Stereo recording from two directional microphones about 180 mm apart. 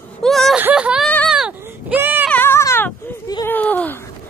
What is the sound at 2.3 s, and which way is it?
Cat, 15° left (ahead or behind).